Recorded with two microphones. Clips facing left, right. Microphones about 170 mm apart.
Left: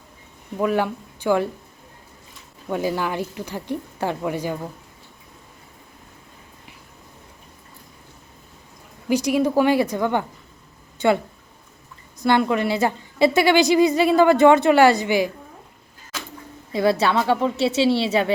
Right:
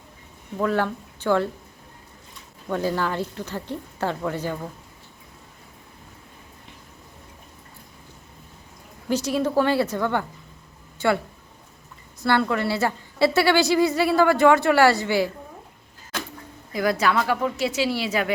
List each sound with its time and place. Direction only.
0.6 s a woman's voice: 15° left (ahead or behind)
2.6 s a woman's voice: 10° left (ahead or behind)
9.0 s a woman's voice: 15° left (ahead or behind)
12.2 s a woman's voice: 15° left (ahead or behind)
16.7 s speech: 30° left (ahead or behind)